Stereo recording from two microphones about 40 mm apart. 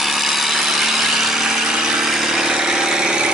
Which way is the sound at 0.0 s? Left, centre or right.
Centre.